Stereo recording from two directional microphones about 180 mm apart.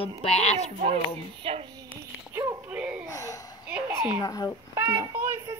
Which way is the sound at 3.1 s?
20° left (ahead or behind).